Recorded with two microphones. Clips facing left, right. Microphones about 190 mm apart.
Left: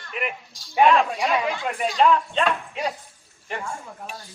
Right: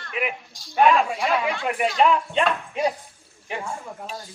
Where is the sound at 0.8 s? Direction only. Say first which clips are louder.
Even; 5° right (ahead or behind).